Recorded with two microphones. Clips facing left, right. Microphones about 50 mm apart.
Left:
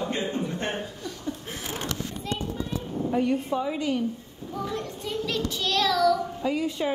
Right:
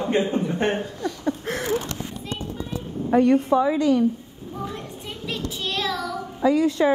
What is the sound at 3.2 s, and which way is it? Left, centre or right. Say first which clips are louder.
Speech: right 9 dB; right.